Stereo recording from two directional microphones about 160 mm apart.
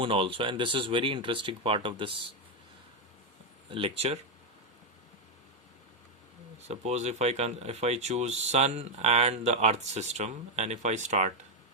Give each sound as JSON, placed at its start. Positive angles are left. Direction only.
{"t": 0.0, "sound": "speech", "side_deg": -35}
{"t": 3.7, "sound": "speech", "side_deg": -35}
{"t": 6.7, "sound": "speech", "side_deg": -45}